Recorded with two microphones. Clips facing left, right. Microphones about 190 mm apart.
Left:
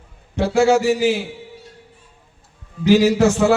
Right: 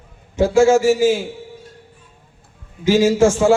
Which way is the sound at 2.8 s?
45° right (ahead or behind).